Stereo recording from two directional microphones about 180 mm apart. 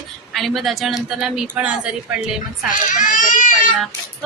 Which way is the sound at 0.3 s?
Centre (ahead or behind).